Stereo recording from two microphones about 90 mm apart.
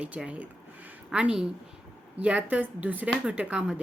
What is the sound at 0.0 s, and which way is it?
Speech, 15° right (ahead or behind).